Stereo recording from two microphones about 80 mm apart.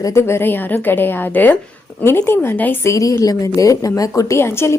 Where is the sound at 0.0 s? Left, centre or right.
Left.